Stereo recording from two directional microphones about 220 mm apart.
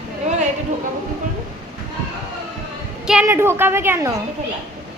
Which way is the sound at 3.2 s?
10° right (ahead or behind).